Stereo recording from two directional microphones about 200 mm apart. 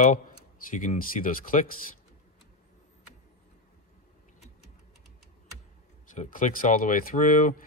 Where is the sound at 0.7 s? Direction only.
40° left (ahead or behind).